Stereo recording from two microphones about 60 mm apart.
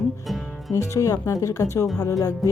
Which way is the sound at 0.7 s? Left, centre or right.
Left.